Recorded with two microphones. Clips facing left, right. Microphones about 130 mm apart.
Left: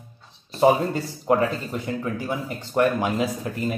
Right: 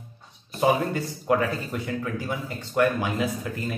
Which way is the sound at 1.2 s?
25° left (ahead or behind).